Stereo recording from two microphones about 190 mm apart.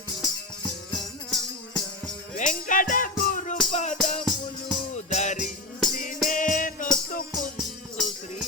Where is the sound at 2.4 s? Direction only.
45° left (ahead or behind).